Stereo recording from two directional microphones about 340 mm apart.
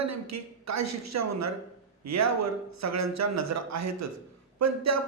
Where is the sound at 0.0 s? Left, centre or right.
Right.